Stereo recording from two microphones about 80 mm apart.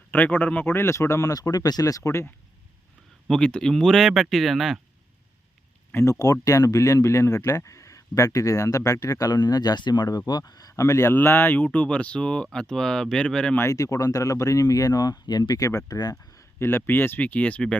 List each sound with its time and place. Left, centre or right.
0.1 s speech: left
3.2 s speech: centre
5.9 s speech: left; by 13.6 s centre
13.6 s speech: left
16.6 s speech: left